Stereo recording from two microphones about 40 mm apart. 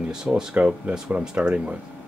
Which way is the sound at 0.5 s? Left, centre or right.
Right.